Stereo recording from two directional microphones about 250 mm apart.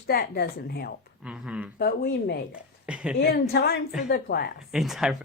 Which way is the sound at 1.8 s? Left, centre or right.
Left.